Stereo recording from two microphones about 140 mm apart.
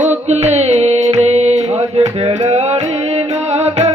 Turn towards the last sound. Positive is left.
turn(degrees=-50)  # may be behind; listen again after turning